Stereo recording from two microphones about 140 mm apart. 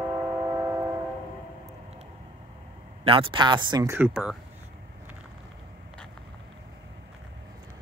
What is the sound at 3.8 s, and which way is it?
Speech, 15° right (ahead or behind).